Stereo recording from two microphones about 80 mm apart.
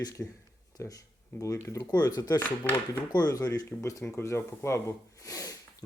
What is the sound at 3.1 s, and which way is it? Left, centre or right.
Speech, left.